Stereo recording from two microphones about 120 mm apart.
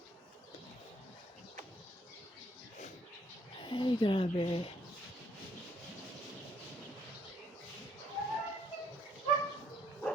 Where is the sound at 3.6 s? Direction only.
40° left (ahead or behind).